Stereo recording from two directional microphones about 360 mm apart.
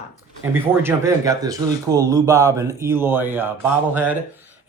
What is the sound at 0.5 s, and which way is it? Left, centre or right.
Speech, centre.